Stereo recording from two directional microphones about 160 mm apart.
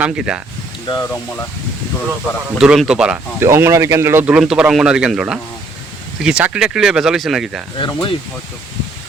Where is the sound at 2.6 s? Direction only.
5° right (ahead or behind).